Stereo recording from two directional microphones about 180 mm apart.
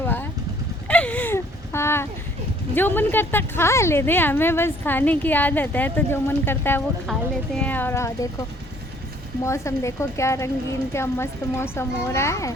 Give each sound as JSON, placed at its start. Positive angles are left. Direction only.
{"t": 0.0, "sound": "vehicle", "side_deg": 10}
{"t": 0.9, "sound": "a sound", "side_deg": 5}
{"t": 2.7, "sound": "a woman's voice", "side_deg": 10}
{"t": 9.4, "sound": "a woman's voice", "side_deg": 15}